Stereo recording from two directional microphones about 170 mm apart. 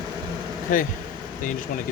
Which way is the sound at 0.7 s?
50° left (ahead or behind).